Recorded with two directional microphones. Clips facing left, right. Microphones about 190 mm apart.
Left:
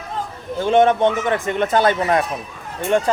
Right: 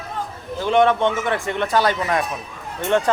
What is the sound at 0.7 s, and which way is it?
Speech, 20° left (ahead or behind).